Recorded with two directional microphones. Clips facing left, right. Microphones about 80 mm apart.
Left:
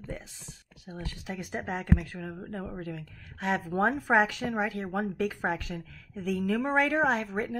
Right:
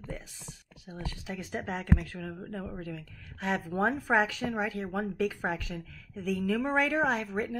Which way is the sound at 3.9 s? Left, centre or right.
Centre.